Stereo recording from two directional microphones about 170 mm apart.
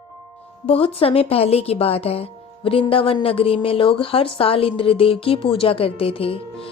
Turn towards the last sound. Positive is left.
turn(degrees=35)  # may be behind; listen again after turning